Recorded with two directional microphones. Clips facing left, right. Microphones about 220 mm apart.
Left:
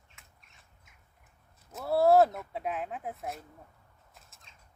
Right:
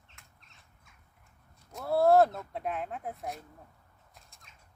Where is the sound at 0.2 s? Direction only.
Centre (ahead or behind).